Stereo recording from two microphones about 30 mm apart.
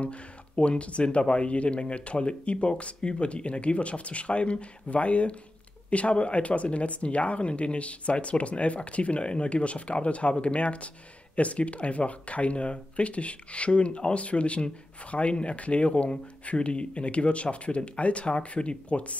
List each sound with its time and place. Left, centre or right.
0.0 s speech: left